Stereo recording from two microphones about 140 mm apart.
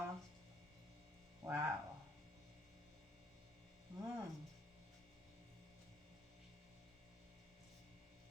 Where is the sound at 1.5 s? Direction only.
20° right (ahead or behind).